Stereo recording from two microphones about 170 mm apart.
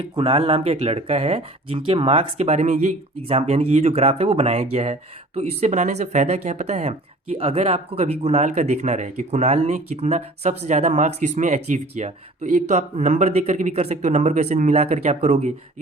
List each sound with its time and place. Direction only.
0.0 s speech: 35° right (ahead or behind)